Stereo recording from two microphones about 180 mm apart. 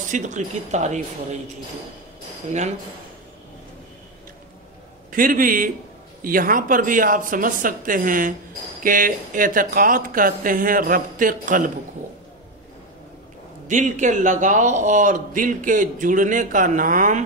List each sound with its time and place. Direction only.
0.1 s speech: 45° right (ahead or behind)
5.1 s a man's voice: 50° right (ahead or behind)
13.7 s a man's voice: 45° right (ahead or behind)